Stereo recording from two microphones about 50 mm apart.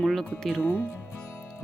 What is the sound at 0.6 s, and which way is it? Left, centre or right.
Speech, left.